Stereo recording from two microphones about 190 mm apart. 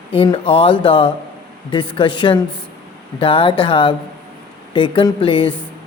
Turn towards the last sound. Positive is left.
turn(degrees=25)  # may be behind; listen again after turning